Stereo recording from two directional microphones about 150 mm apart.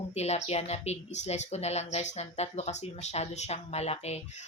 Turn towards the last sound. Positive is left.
turn(degrees=45)  # may be behind; listen again after turning